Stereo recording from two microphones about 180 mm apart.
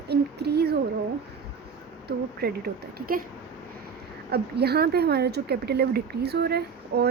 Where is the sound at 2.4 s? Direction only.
60° right (ahead or behind).